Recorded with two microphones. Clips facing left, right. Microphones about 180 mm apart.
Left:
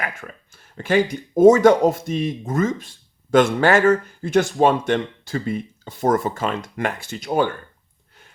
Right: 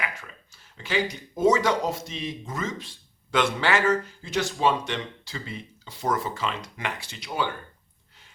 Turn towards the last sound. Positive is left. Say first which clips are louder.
# left 9 dB
turn(degrees=50)  # may be behind; listen again after turning